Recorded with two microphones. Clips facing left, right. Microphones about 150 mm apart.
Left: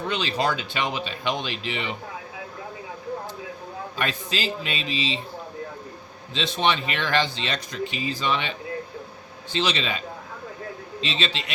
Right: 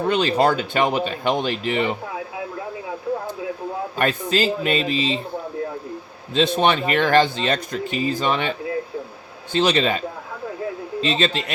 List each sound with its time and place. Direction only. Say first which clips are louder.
0.0 s speech: right 7 dB; 55° right (ahead or behind)
3.9 s speech: right 8 dB; 50° right (ahead or behind)
6.3 s speech: right 6 dB; 55° right (ahead or behind)
11.0 s speech: right 7 dB; 50° right (ahead or behind)